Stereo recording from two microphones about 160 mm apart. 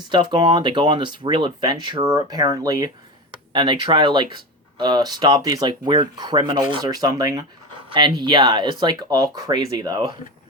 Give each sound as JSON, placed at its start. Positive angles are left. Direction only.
{"t": 0.0, "sound": "speech", "side_deg": -30}